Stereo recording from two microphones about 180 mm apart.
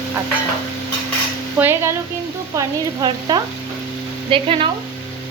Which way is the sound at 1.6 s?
15° right (ahead or behind).